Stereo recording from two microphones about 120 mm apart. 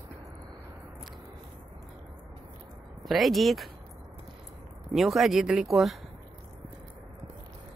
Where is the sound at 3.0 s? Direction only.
Centre (ahead or behind).